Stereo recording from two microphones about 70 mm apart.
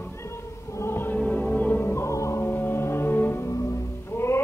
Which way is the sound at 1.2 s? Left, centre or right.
Left.